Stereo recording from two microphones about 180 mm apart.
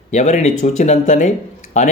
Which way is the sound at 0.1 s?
40° left (ahead or behind).